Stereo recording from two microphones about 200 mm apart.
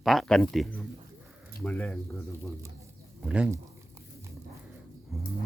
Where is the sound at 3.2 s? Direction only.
5° right (ahead or behind).